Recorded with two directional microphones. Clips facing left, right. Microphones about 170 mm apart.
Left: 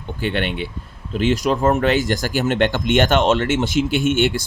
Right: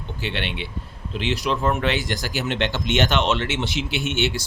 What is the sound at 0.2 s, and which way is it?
Speech, 50° left (ahead or behind).